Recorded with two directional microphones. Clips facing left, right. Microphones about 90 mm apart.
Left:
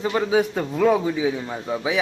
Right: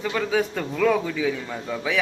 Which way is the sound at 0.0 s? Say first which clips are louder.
Left 3 dB; 25° left (ahead or behind).